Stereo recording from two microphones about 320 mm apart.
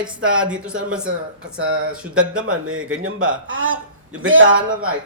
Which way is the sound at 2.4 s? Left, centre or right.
Right.